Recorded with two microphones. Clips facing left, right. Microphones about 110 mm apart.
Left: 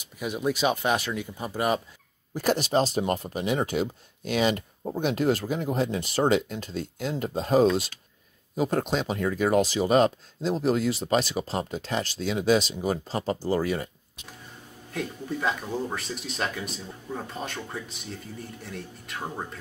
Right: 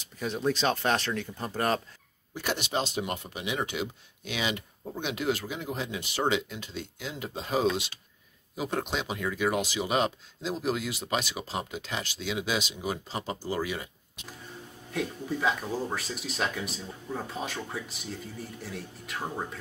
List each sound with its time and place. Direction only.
0.0 s speech: 10° left (ahead or behind)
2.3 s speech: 40° left (ahead or behind)
14.9 s speech: centre (ahead or behind)